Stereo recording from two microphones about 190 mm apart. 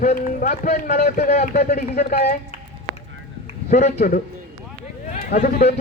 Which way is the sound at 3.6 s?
40° left (ahead or behind).